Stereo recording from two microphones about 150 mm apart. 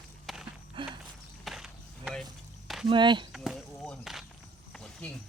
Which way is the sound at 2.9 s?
30° right (ahead or behind).